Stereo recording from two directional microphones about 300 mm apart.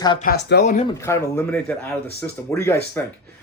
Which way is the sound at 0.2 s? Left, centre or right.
Left.